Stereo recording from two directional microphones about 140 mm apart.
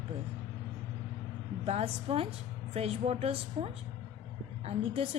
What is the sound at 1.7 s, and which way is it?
A woman's voice, 45° right (ahead or behind).